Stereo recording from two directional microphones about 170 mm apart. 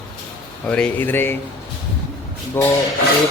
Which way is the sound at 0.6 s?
5° left (ahead or behind).